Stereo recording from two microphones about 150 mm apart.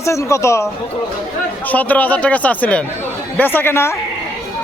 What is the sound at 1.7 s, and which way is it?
A man's voice, 10° left (ahead or behind).